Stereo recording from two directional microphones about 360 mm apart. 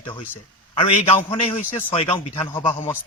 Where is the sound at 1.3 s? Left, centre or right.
Centre.